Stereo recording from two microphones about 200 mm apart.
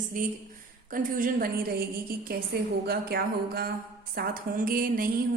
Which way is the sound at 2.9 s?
50° right (ahead or behind).